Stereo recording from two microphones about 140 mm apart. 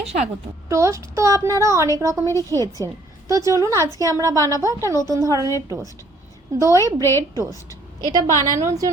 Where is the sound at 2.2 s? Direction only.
20° left (ahead or behind).